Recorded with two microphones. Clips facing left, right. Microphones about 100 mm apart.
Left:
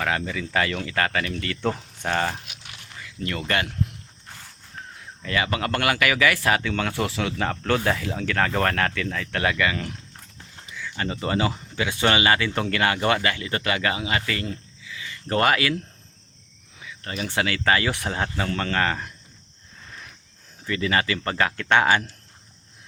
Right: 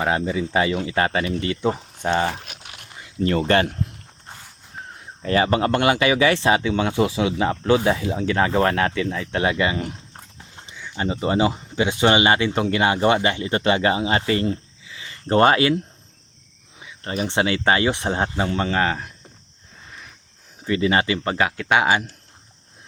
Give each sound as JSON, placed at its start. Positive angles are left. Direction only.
{"t": 0.0, "sound": "speech", "side_deg": -25}
{"t": 2.7, "sound": "a sound", "side_deg": -25}
{"t": 5.2, "sound": "speech", "side_deg": -35}
{"t": 16.8, "sound": "speech", "side_deg": -30}
{"t": 20.7, "sound": "speech", "side_deg": -25}